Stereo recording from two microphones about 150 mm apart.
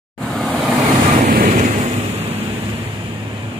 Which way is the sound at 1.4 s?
55° right (ahead or behind).